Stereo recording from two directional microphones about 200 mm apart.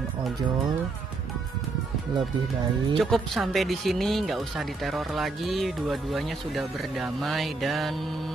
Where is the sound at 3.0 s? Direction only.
Centre (ahead or behind).